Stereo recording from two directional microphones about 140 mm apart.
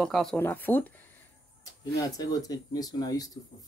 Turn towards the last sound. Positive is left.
turn(degrees=25)  # may be behind; listen again after turning